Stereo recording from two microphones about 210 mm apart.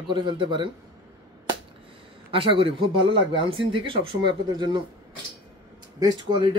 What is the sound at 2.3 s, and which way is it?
Speech, 25° right (ahead or behind).